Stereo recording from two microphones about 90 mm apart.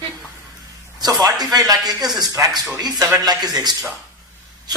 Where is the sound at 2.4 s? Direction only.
35° right (ahead or behind).